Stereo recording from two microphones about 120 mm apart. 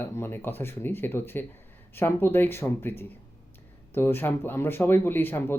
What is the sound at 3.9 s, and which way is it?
Speech, 20° left (ahead or behind).